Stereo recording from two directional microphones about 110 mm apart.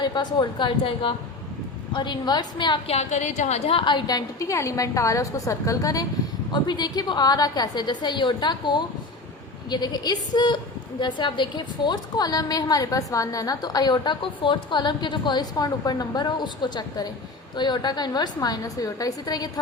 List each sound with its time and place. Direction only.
0.0 s a woman's voice: 40° left (ahead or behind)
2.8 s a woman's voice: 80° left
3.8 s a woman's voice: 45° left (ahead or behind)